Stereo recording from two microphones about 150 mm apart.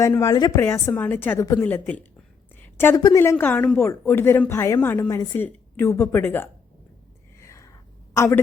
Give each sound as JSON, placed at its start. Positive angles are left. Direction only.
{"t": 0.0, "sound": "a woman's voice", "side_deg": 20}
{"t": 5.0, "sound": "a woman's voice", "side_deg": 25}
{"t": 5.4, "sound": "a woman's voice", "side_deg": 15}
{"t": 7.3, "sound": "a sound", "side_deg": 20}
{"t": 8.1, "sound": "speech", "side_deg": 20}